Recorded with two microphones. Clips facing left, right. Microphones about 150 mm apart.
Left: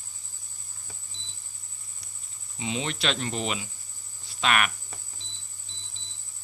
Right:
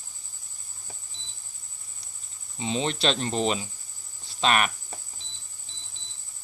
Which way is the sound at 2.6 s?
30° right (ahead or behind).